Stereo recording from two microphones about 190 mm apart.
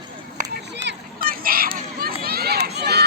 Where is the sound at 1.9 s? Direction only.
50° right (ahead or behind).